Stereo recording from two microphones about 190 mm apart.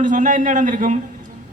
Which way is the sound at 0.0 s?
40° right (ahead or behind).